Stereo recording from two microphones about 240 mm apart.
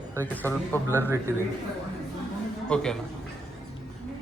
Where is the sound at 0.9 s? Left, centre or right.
Centre.